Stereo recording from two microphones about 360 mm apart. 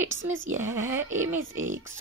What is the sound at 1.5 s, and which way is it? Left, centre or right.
Speech, right.